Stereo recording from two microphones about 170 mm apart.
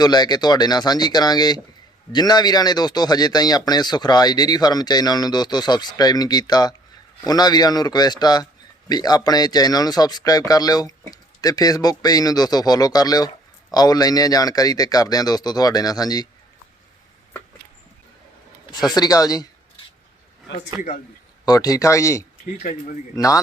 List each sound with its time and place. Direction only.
0.0 s speech: 25° left (ahead or behind)
18.9 s speech: 20° left (ahead or behind)
21.4 s speech: 20° left (ahead or behind)
22.6 s speech: 45° left (ahead or behind)
23.1 s speech: 20° left (ahead or behind)